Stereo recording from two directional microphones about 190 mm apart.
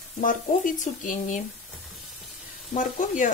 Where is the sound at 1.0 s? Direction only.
40° left (ahead or behind).